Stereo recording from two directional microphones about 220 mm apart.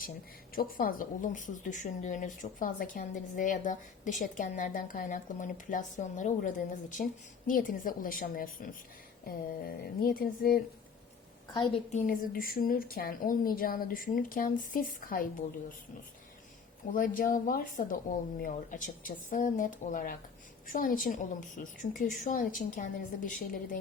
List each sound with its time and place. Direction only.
0.5 s a woman's voice: 40° left (ahead or behind)
11.9 s a woman's voice: 35° left (ahead or behind)
16.9 s a woman's voice: 40° left (ahead or behind)